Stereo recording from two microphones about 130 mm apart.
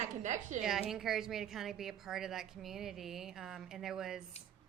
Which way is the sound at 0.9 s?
5° right (ahead or behind).